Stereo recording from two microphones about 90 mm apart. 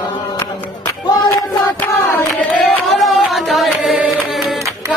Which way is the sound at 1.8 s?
15° left (ahead or behind).